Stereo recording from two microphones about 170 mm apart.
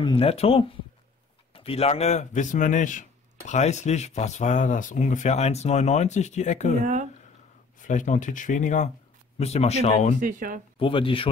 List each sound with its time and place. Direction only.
0.0 s a man's voice: 35° left (ahead or behind)
6.8 s speech: 45° right (ahead or behind)
7.8 s a man's voice: 50° left (ahead or behind)
10.2 s speech: 50° right (ahead or behind)
10.8 s speech: 30° left (ahead or behind)